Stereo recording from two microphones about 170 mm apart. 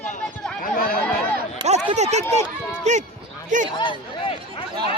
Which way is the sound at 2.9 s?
45° right (ahead or behind).